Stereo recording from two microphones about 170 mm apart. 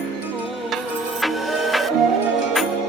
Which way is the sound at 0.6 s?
Centre (ahead or behind).